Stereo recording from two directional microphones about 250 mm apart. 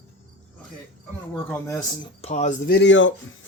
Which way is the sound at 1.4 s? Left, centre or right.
Centre.